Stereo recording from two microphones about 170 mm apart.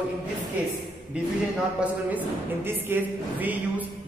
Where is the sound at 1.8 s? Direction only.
10° right (ahead or behind).